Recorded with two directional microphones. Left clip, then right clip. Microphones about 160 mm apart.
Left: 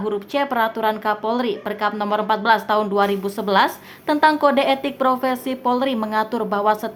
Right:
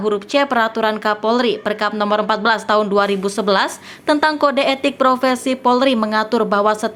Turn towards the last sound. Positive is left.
turn(degrees=-20)  # may be behind; listen again after turning